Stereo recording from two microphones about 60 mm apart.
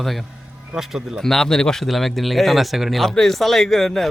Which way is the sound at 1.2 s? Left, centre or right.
Centre.